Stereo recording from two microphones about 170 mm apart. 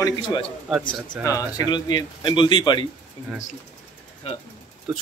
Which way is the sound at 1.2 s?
20° left (ahead or behind).